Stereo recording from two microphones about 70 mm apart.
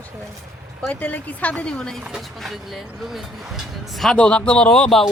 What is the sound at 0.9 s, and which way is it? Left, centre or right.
Speech, left.